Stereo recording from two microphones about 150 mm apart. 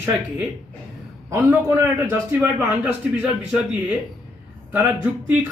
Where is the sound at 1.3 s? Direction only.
10° right (ahead or behind).